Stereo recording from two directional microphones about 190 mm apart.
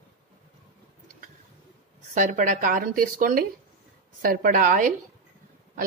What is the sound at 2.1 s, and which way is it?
A woman's voice, 40° right (ahead or behind).